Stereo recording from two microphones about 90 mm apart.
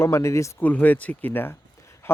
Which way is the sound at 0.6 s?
20° left (ahead or behind).